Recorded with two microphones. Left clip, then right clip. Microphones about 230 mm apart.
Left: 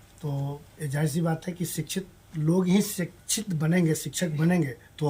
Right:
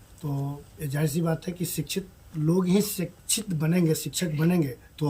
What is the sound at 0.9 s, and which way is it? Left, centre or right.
Speech, centre.